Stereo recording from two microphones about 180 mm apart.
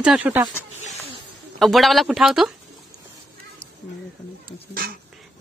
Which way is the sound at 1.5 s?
Centre (ahead or behind).